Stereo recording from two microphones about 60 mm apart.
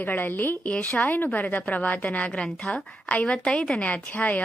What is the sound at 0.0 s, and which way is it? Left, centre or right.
A woman's voice, left.